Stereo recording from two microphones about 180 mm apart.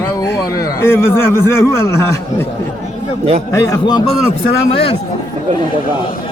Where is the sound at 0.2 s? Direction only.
20° left (ahead or behind).